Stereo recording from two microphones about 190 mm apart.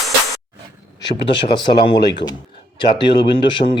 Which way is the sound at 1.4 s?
25° left (ahead or behind).